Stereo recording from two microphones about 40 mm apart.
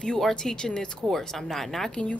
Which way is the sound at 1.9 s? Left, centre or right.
Left.